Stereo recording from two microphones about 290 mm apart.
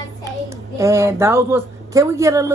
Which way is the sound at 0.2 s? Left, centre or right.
Centre.